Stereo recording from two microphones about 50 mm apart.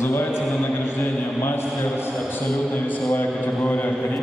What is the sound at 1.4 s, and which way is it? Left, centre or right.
Speech, left.